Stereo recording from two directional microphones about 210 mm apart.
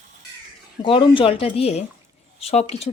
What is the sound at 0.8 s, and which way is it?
Speech, 25° left (ahead or behind).